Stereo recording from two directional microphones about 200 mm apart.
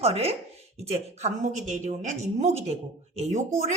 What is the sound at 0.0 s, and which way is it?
A woman's voice, 30° right (ahead or behind).